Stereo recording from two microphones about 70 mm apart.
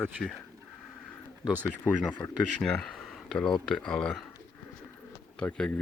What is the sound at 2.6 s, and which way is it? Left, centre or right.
Speech, centre.